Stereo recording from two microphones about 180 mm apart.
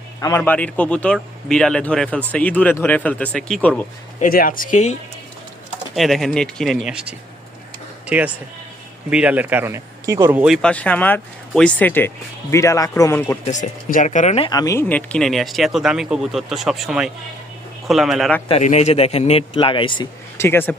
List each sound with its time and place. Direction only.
0.2 s speech: 20° left (ahead or behind)
4.2 s speech: 50° left (ahead or behind)
5.9 s speech: centre (ahead or behind)
13.4 s speech: 45° left (ahead or behind); by 18.4 s 5° left (ahead or behind)
18.4 s a man's voice: 35° left (ahead or behind)
20.4 s speech: 10° left (ahead or behind)